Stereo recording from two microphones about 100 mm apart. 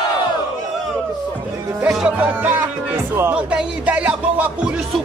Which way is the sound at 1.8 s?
5° right (ahead or behind).